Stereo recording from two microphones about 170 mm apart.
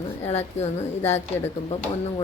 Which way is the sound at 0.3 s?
40° left (ahead or behind).